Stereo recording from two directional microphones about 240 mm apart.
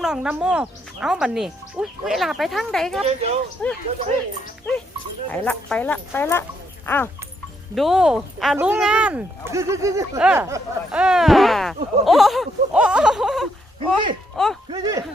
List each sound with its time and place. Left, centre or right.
0.0 s speech: centre
5.3 s speech: centre
7.8 s speech: centre
13.7 s speech: right
14.3 s speech: centre
14.7 s speech: centre